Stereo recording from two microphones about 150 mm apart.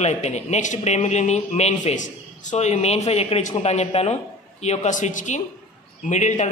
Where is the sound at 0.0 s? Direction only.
50° left (ahead or behind).